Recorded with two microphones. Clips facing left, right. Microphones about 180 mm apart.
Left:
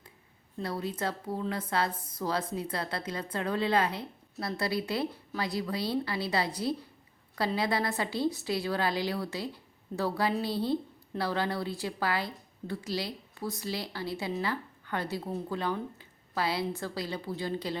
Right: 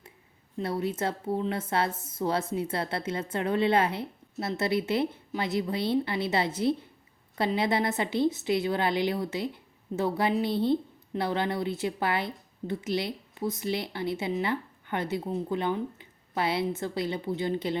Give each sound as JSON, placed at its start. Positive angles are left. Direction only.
{"t": 0.6, "sound": "a woman's voice", "side_deg": -25}